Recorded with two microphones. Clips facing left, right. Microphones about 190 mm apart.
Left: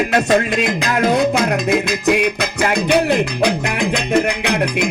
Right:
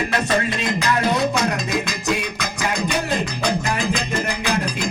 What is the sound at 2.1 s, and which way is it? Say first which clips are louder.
Music: left 8 dB; 70° left (ahead or behind).